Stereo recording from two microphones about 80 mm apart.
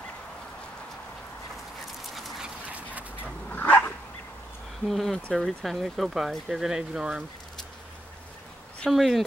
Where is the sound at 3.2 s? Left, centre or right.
Left.